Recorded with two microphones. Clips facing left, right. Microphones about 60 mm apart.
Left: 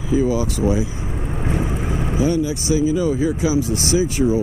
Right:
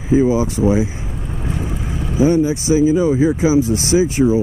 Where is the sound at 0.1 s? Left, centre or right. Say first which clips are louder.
Right 4 dB; right.